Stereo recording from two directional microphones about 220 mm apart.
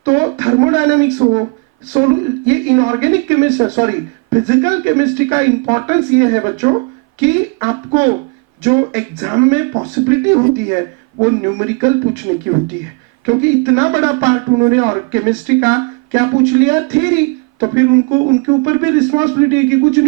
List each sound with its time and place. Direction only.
0.0 s speech: 20° right (ahead or behind)
1.2 s speech: 25° right (ahead or behind)
18.2 s speech: 25° right (ahead or behind)